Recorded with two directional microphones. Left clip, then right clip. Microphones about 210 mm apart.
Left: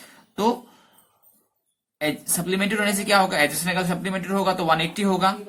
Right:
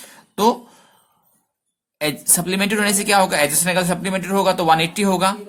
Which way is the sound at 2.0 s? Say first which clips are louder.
Right 4 dB; 40° right (ahead or behind).